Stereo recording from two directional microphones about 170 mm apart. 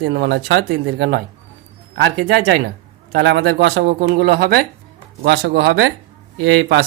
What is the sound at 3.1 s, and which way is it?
Speech, 70° right (ahead or behind).